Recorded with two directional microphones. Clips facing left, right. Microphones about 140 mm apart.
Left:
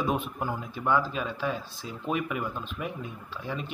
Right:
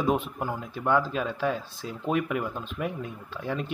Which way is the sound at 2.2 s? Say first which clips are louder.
Right 2 dB; 70° right (ahead or behind).